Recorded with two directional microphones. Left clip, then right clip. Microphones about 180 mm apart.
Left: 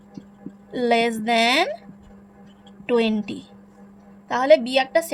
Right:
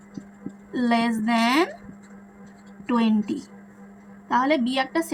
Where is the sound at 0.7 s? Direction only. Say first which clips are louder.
Left 4 dB; 55° left (ahead or behind).